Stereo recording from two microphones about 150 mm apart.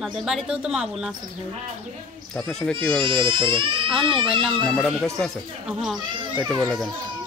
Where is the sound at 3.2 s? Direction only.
35° right (ahead or behind).